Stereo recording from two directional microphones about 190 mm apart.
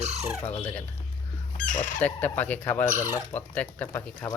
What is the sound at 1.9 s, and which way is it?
Chicken, 10° left (ahead or behind).